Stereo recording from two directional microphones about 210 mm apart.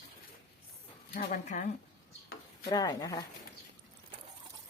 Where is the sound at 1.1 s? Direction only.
40° left (ahead or behind).